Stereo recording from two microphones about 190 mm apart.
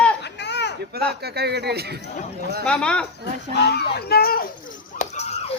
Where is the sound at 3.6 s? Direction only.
55° left (ahead or behind).